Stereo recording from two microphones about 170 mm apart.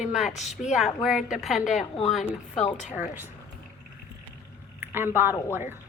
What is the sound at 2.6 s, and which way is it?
Speech, 45° left (ahead or behind).